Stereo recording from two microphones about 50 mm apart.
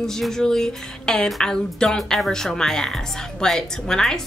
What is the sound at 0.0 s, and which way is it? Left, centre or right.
Speech, centre.